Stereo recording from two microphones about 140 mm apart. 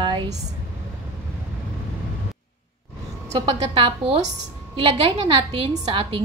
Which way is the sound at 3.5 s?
40° right (ahead or behind).